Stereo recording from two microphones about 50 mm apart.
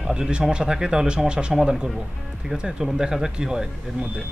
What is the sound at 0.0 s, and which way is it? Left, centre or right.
Speech, centre.